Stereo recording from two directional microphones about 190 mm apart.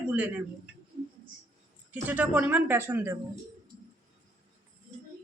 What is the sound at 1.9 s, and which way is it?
A woman's voice, 10° right (ahead or behind).